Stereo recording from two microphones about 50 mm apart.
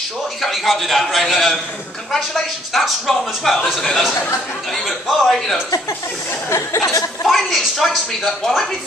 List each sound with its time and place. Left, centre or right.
0.4 s a man's voice: centre
2.7 s a man's voice: centre
6.5 s speech: left
7.2 s a man's voice: centre